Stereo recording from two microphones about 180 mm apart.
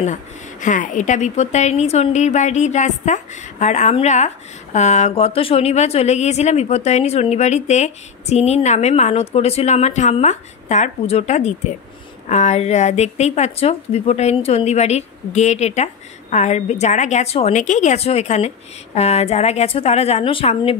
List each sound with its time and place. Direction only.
0.0 s a woman's voice: 45° left (ahead or behind)